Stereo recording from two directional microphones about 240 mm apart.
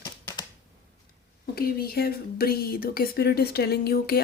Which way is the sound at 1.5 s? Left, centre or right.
Left.